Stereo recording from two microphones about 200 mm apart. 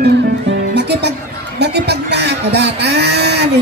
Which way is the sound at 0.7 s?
55° right (ahead or behind).